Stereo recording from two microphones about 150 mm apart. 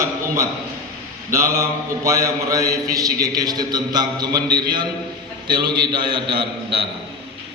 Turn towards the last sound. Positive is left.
turn(degrees=-35)  # may be behind; listen again after turning